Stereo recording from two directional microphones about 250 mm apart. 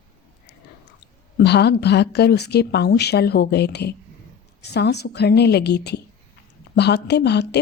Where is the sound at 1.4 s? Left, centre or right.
Left.